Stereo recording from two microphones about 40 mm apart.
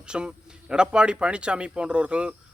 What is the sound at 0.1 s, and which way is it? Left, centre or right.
Speech, right.